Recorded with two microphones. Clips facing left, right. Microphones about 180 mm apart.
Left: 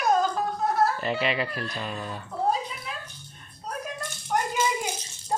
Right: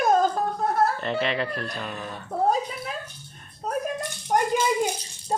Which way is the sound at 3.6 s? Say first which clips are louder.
Right 8 dB; 50° right (ahead or behind).